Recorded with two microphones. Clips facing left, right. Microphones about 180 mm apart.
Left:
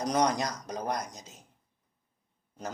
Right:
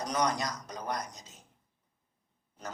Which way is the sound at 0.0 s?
40° left (ahead or behind).